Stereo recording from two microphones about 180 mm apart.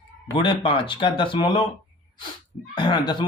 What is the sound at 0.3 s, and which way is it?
Speech, 30° left (ahead or behind).